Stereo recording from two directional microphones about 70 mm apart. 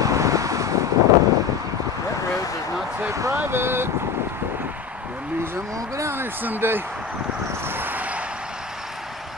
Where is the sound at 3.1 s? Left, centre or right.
Right.